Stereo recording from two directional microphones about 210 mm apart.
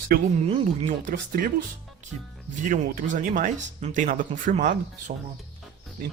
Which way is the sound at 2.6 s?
40° right (ahead or behind).